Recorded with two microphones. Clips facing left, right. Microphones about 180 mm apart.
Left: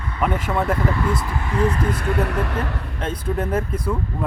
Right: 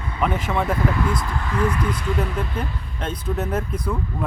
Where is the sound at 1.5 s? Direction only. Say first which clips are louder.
Left 2 dB; 25° left (ahead or behind).